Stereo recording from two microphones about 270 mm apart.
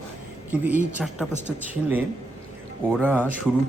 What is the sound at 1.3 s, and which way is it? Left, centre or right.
Speech, right.